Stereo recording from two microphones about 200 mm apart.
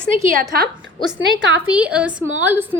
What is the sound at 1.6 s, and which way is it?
A woman's voice, 5° right (ahead or behind).